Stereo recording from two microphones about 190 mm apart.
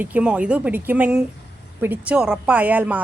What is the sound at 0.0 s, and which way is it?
A woman's voice, 5° right (ahead or behind).